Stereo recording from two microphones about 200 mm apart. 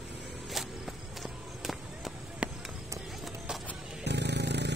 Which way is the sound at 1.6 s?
Centre (ahead or behind).